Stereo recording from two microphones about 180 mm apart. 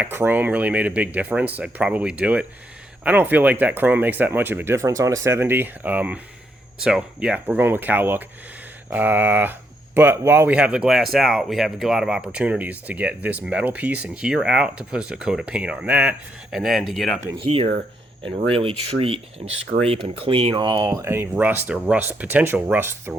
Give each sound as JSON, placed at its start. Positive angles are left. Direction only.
{"t": 0.0, "sound": "speech", "side_deg": -10}
{"t": 17.4, "sound": "speech", "side_deg": -30}
{"t": 19.5, "sound": "speech", "side_deg": -90}
{"t": 19.9, "sound": "speech", "side_deg": -30}